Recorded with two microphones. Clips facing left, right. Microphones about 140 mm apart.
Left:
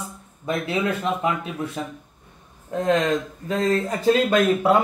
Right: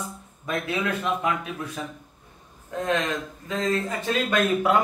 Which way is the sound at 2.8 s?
30° left (ahead or behind).